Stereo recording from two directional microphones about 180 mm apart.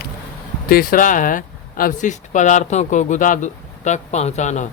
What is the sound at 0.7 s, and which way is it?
Speech, 55° left (ahead or behind).